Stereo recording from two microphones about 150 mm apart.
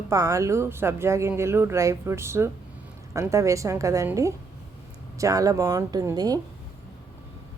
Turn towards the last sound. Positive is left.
turn(degrees=-25)  # may be behind; listen again after turning